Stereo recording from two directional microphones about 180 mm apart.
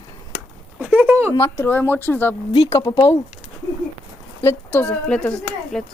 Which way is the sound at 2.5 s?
35° left (ahead or behind).